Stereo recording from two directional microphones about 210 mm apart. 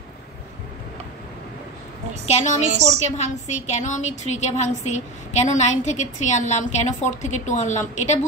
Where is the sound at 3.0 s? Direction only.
35° left (ahead or behind).